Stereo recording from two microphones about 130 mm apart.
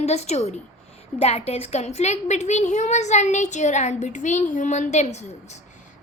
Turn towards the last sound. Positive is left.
turn(degrees=60)  # may be behind; listen again after turning